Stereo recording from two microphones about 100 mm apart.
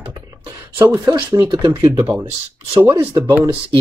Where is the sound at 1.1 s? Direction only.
35° right (ahead or behind).